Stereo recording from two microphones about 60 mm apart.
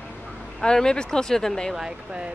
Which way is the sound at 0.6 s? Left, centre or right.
Centre.